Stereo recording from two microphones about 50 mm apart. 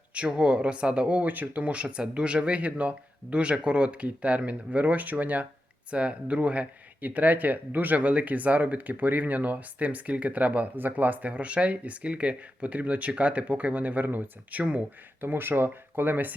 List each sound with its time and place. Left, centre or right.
0.1 s speech: right
15.2 s speech: right